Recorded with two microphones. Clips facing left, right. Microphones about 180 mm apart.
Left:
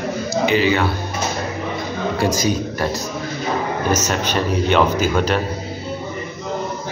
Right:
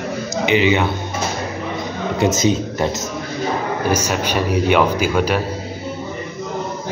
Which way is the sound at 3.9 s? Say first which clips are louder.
Even; 10° right (ahead or behind).